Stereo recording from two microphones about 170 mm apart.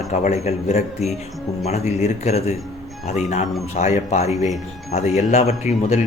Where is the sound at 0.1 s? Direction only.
40° left (ahead or behind).